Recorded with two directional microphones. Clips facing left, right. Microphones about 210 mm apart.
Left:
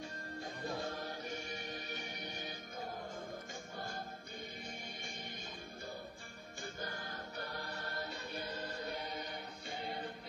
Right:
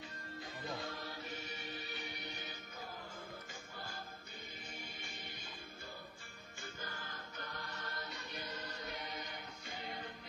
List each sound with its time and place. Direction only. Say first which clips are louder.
0.4 s music: left 3 dB; 45° left (ahead or behind)